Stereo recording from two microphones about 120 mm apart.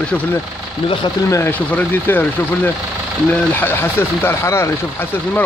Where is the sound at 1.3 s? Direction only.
20° left (ahead or behind).